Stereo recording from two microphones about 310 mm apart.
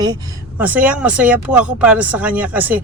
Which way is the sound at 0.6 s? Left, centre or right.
Centre.